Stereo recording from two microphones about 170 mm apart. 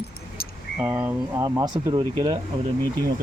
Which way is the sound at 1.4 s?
25° right (ahead or behind).